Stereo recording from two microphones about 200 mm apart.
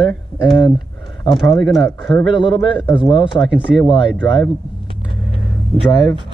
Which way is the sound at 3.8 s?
25° left (ahead or behind).